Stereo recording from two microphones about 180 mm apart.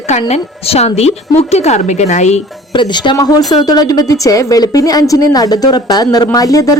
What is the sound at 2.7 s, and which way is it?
A woman's voice, 25° left (ahead or behind).